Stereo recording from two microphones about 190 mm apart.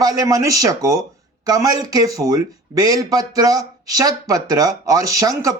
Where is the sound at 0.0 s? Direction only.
20° right (ahead or behind).